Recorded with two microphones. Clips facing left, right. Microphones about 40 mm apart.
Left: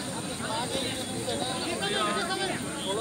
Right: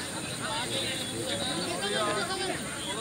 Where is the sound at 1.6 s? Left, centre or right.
Centre.